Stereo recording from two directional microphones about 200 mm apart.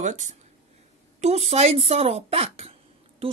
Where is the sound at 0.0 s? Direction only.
40° right (ahead or behind).